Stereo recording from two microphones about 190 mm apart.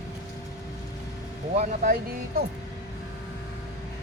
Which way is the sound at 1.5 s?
40° right (ahead or behind).